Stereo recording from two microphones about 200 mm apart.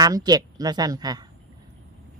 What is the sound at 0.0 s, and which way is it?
A woman's voice, 20° right (ahead or behind).